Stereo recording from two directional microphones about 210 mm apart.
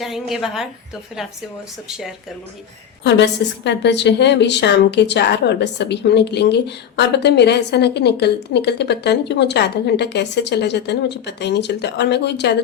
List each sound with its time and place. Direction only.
0.0 s a woman's voice: centre (ahead or behind)
1.9 s a woman's voice: centre (ahead or behind)
3.0 s a woman's voice: 55° left (ahead or behind)